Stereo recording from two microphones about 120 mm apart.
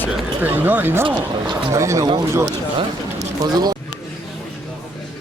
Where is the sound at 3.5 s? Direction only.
35° right (ahead or behind).